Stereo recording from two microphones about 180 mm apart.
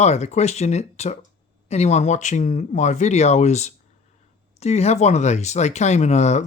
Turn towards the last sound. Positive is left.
turn(degrees=40)  # may be behind; listen again after turning